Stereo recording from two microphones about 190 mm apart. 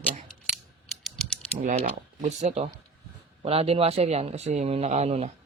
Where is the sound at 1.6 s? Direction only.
40° right (ahead or behind).